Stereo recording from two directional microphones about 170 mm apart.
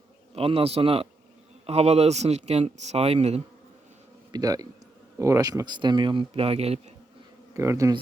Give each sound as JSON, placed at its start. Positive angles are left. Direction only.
{"t": 0.3, "sound": "speech", "side_deg": -35}
{"t": 4.3, "sound": "a man's voice", "side_deg": -20}
{"t": 7.5, "sound": "speech", "side_deg": -15}